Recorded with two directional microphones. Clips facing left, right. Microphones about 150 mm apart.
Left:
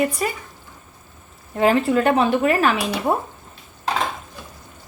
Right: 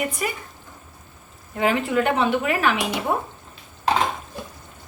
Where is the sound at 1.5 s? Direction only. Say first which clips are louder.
Left 4 dB; 35° left (ahead or behind).